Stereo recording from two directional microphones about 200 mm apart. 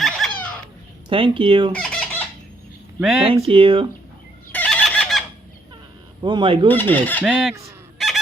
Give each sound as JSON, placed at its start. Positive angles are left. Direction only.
{"t": 0.0, "sound": "baby laughter", "side_deg": 0}
{"t": 1.1, "sound": "speech", "side_deg": -25}
{"t": 1.7, "sound": "fowl", "side_deg": 5}
{"t": 3.0, "sound": "speech", "side_deg": 0}
{"t": 3.2, "sound": "speech", "side_deg": -30}
{"t": 4.5, "sound": "fowl", "side_deg": 5}
{"t": 6.2, "sound": "speech", "side_deg": -25}
{"t": 6.9, "sound": "speech", "side_deg": 10}
{"t": 7.3, "sound": "speech", "side_deg": 0}
{"t": 7.9, "sound": "honk", "side_deg": 0}